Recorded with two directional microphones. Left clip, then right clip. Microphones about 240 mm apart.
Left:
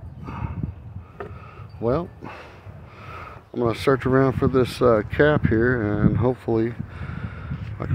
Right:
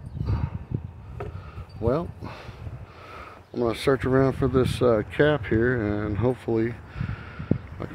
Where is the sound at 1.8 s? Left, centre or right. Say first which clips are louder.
Left 2 dB; centre.